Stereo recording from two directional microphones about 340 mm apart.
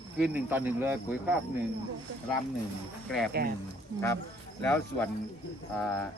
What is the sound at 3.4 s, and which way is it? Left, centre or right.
Speech, right.